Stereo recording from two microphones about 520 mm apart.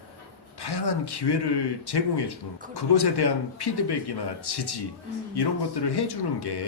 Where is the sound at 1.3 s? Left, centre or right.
Left.